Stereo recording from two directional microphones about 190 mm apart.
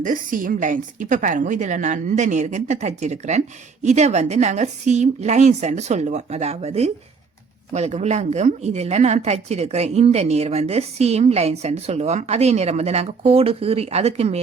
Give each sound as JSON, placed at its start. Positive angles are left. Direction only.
{"t": 0.0, "sound": "a woman's voice", "side_deg": -45}